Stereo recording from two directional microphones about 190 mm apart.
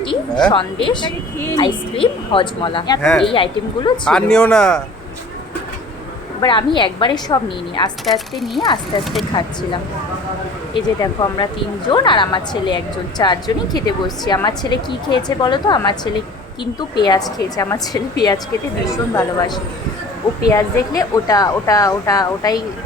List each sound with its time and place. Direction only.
0.5 s a woman's voice: 25° left (ahead or behind)
3.0 s speech: centre (ahead or behind)
3.3 s a woman's voice: 25° left (ahead or behind)
4.0 s speech: 5° left (ahead or behind)
6.4 s a woman's voice: 25° left (ahead or behind)
8.0 s speech: centre (ahead or behind)
8.6 s a woman's voice: 25° left (ahead or behind)
10.8 s a woman's voice: 20° left (ahead or behind)